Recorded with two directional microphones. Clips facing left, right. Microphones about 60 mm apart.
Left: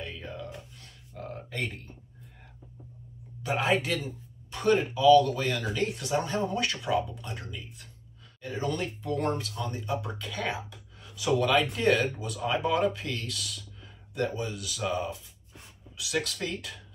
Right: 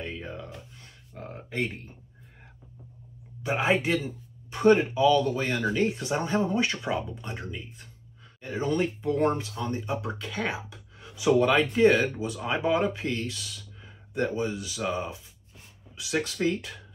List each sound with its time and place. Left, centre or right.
0.0 s a sound: right
3.4 s speech: centre
10.7 s speech: centre